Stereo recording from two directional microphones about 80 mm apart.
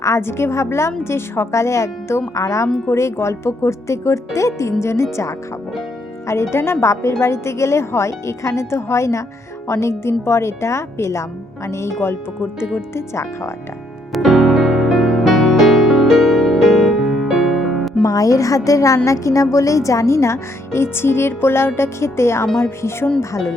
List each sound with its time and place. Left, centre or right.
0.0 s a woman's voice: left
2.6 s speech: centre
2.9 s a woman's voice: left
6.2 s a woman's voice: left
14.1 s music: centre
18.0 s a woman's voice: left